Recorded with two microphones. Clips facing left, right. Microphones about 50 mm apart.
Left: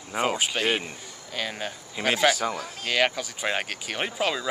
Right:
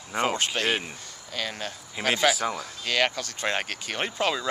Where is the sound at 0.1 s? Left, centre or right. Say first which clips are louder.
Even; centre.